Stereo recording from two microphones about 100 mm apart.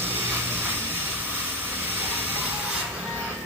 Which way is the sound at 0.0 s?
20° right (ahead or behind).